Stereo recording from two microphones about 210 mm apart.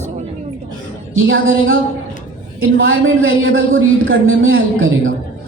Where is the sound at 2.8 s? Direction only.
70° right (ahead or behind).